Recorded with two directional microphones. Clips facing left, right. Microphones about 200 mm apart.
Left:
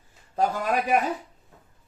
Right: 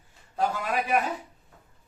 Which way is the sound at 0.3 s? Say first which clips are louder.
Left 3 dB; 40° left (ahead or behind).